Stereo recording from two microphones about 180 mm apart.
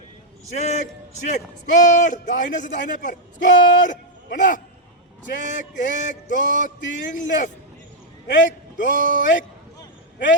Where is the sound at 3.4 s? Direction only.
45° left (ahead or behind).